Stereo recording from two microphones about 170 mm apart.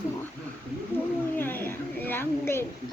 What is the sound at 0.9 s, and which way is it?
Wild animals, 15° left (ahead or behind).